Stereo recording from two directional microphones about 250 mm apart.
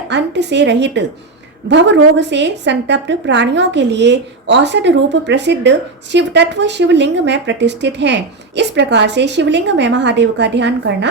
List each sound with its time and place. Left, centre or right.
0.1 s a woman's voice: right